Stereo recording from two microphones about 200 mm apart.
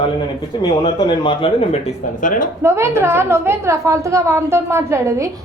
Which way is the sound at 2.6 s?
10° right (ahead or behind).